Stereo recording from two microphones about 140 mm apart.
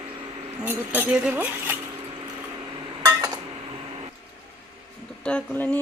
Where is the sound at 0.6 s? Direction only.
15° right (ahead or behind).